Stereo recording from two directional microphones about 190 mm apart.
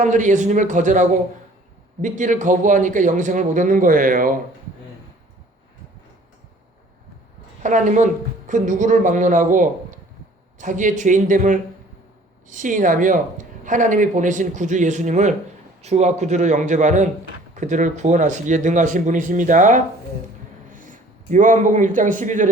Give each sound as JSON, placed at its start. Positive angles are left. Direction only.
{"t": 0.0, "sound": "a man's voice", "side_deg": -40}
{"t": 7.6, "sound": "a man's voice", "side_deg": -40}